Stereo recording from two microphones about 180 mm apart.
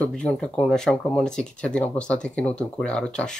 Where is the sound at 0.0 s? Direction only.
5° left (ahead or behind).